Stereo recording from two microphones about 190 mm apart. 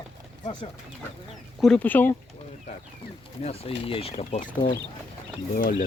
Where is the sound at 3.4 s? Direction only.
30° left (ahead or behind).